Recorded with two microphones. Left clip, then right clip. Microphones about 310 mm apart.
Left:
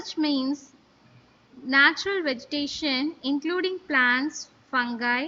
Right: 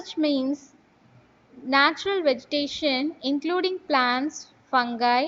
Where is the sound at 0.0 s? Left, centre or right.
Centre.